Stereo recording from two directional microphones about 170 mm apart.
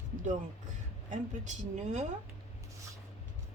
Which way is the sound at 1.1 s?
45° right (ahead or behind).